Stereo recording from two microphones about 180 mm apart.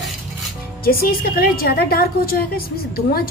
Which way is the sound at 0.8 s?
55° left (ahead or behind).